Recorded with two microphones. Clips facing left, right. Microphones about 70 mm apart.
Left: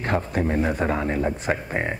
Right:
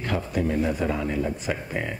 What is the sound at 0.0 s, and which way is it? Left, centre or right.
Speech, left.